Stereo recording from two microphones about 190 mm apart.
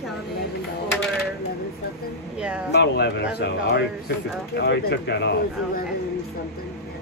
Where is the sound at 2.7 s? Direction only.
60° left (ahead or behind).